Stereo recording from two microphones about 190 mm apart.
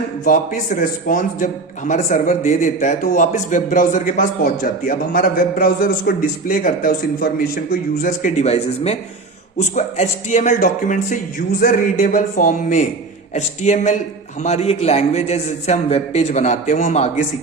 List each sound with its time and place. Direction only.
0.3 s a man's voice: 45° left (ahead or behind)